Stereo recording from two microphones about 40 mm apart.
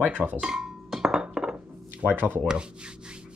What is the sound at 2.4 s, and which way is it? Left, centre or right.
Speech, right.